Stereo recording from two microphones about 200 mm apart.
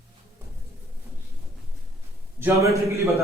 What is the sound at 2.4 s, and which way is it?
Speech, 15° right (ahead or behind).